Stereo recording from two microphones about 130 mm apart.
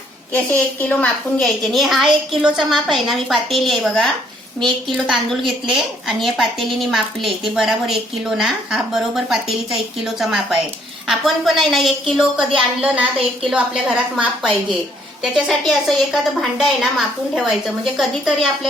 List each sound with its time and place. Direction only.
0.3 s a woman's voice: 15° left (ahead or behind)
5.0 s a woman's voice: centre (ahead or behind)
17.9 s a woman's voice: centre (ahead or behind)